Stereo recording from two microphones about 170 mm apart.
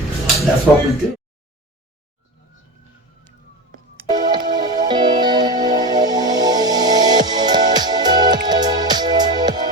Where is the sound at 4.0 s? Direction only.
25° right (ahead or behind).